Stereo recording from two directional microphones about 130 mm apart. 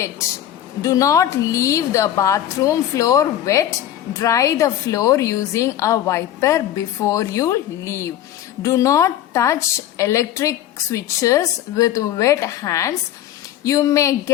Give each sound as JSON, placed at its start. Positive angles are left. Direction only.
{"t": 0.8, "sound": "a woman's voice", "side_deg": 25}